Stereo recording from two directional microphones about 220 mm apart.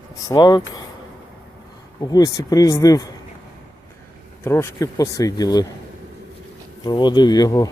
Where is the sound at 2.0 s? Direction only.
15° left (ahead or behind).